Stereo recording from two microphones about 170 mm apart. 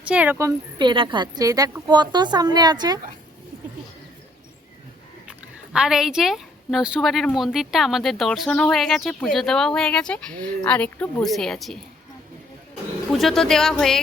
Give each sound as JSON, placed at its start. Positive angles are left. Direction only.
{"t": 0.0, "sound": "speech", "side_deg": -10}
{"t": 5.3, "sound": "speech", "side_deg": -5}
{"t": 13.1, "sound": "speech", "side_deg": 0}